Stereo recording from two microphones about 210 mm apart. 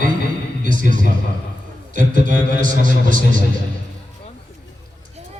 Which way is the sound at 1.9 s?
40° right (ahead or behind).